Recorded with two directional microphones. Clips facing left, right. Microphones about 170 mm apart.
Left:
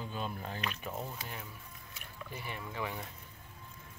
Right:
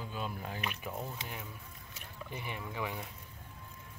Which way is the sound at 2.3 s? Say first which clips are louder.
Right 1 dB; 15° right (ahead or behind).